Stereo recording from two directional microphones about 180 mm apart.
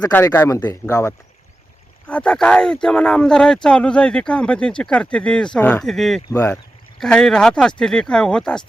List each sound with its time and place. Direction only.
0.1 s speech: 15° left (ahead or behind)
2.0 s speech: 5° left (ahead or behind)
6.3 s speech: 15° left (ahead or behind)